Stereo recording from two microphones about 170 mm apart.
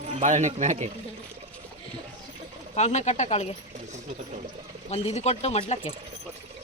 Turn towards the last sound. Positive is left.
turn(degrees=35)  # may be behind; listen again after turning